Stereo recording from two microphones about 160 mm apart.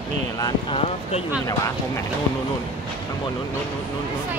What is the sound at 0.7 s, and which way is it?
Speech, 40° left (ahead or behind).